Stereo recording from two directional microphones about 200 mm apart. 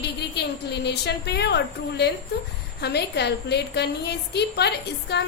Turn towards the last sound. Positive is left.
turn(degrees=55)  # may be behind; listen again after turning